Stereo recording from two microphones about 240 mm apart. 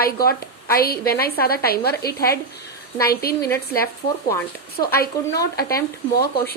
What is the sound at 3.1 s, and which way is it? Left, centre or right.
Speech, left.